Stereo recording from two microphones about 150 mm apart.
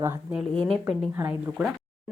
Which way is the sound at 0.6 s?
Centre (ahead or behind).